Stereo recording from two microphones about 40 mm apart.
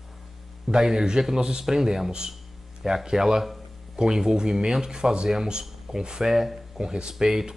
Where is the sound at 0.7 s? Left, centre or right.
Centre.